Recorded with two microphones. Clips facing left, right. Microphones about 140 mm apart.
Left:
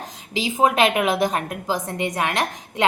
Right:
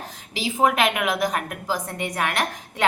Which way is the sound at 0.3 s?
20° left (ahead or behind).